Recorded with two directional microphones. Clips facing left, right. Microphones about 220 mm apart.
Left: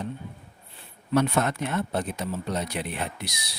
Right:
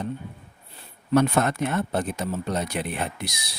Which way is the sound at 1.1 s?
45° right (ahead or behind).